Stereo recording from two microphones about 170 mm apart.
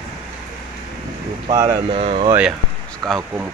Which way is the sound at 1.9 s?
35° right (ahead or behind).